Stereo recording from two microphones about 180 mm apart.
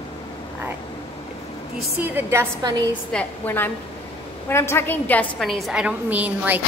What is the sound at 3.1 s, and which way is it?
A woman's voice, 10° left (ahead or behind).